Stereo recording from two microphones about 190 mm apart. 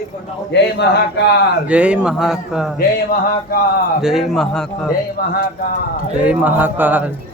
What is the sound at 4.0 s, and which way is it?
Speech, centre (ahead or behind).